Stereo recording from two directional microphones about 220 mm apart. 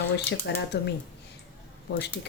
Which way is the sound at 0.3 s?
50° left (ahead or behind).